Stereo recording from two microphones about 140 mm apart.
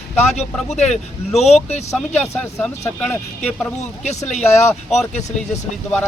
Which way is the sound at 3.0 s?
5° left (ahead or behind).